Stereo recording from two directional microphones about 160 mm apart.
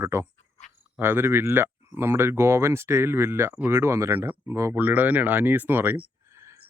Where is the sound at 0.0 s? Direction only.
15° right (ahead or behind).